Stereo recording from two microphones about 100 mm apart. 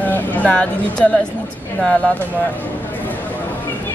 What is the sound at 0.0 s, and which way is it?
Speech, 15° left (ahead or behind).